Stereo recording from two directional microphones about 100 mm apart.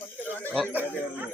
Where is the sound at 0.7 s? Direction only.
20° right (ahead or behind).